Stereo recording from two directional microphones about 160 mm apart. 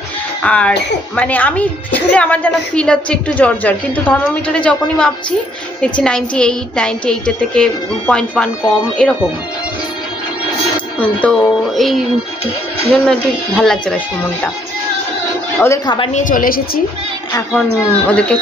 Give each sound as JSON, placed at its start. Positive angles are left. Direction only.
{"t": 0.4, "sound": "a child's voice", "side_deg": 5}
{"t": 11.0, "sound": "a woman's voice", "side_deg": 10}
{"t": 15.6, "sound": "a woman's voice", "side_deg": 20}
{"t": 16.1, "sound": "a woman's voice", "side_deg": 50}
{"t": 17.5, "sound": "a woman's voice", "side_deg": 5}